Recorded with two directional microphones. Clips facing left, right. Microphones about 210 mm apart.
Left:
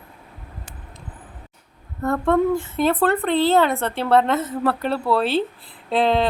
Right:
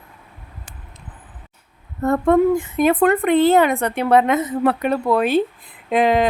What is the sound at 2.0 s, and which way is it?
Speech, 20° right (ahead or behind).